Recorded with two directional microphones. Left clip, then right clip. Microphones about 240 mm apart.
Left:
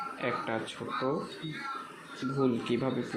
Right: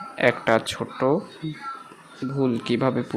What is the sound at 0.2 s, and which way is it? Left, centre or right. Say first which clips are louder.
Speech: right 15 dB; right.